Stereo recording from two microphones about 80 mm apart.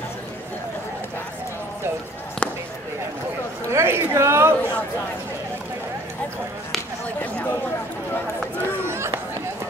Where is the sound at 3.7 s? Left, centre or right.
Right.